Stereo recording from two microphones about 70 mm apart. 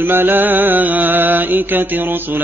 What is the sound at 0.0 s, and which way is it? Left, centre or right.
Mantra, right.